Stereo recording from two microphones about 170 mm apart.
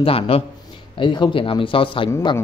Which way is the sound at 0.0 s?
35° left (ahead or behind).